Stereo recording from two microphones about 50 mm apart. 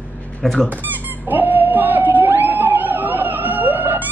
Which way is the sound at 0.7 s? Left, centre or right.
Right.